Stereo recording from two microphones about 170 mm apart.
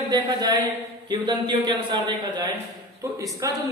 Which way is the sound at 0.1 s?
25° right (ahead or behind).